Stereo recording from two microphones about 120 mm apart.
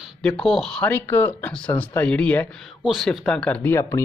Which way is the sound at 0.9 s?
15° left (ahead or behind).